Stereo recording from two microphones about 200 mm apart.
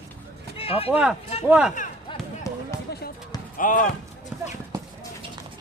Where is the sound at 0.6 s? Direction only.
30° left (ahead or behind).